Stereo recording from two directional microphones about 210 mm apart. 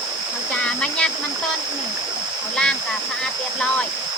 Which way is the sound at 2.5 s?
5° left (ahead or behind).